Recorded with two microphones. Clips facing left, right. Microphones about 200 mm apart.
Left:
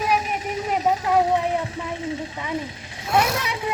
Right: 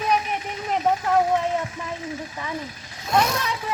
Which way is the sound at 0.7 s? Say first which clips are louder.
Even; 10° left (ahead or behind).